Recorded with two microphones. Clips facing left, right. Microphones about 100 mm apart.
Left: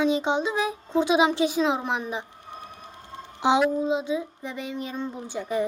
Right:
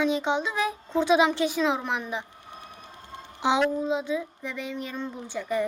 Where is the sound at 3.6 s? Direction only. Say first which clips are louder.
Left 2 dB; 15° left (ahead or behind).